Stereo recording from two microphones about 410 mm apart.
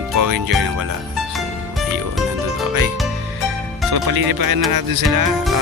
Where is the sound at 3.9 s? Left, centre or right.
Right.